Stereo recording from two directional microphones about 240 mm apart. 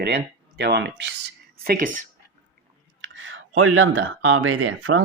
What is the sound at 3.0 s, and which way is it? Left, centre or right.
Speech, right.